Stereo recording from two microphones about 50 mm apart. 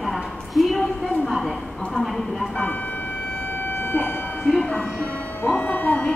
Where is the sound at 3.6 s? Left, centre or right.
Left.